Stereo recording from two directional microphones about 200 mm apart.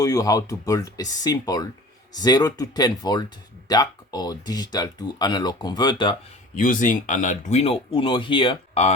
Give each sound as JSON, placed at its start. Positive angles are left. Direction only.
{"t": 0.0, "sound": "speech", "side_deg": 20}
{"t": 6.6, "sound": "speech", "side_deg": 40}